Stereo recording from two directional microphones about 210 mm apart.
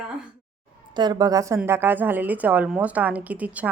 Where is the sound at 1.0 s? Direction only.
20° right (ahead or behind).